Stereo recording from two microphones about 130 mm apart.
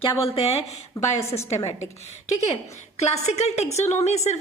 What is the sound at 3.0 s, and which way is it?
A woman's voice, 55° left (ahead or behind).